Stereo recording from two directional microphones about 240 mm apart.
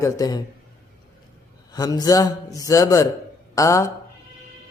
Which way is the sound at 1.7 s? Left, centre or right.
Centre.